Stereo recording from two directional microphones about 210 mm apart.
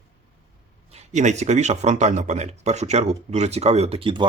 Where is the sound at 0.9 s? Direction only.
30° right (ahead or behind).